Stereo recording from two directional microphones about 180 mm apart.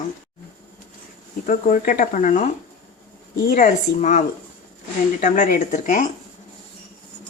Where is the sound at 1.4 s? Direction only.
50° left (ahead or behind).